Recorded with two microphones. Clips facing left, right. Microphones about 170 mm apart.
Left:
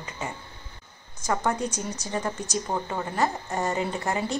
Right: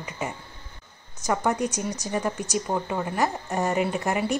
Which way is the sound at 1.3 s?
15° right (ahead or behind).